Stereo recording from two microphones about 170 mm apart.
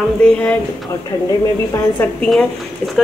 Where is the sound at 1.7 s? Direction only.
10° left (ahead or behind).